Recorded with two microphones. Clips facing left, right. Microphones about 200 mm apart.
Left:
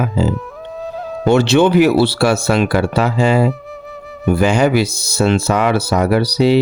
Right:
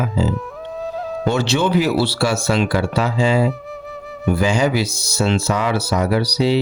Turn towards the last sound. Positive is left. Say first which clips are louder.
# left 4 dB
turn(degrees=60)  # may be behind; listen again after turning